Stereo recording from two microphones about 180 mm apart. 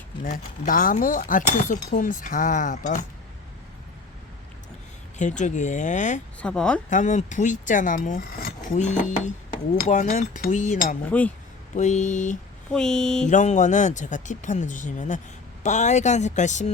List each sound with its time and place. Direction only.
0.3 s speech: 50° left (ahead or behind)
5.1 s speech: 40° left (ahead or behind)
6.4 s a woman's voice: 5° left (ahead or behind)
6.9 s speech: 40° left (ahead or behind)
11.1 s a woman's voice: 5° left (ahead or behind)
11.8 s speech: 40° left (ahead or behind)
12.7 s speech: 5° left (ahead or behind)
13.2 s speech: 40° left (ahead or behind)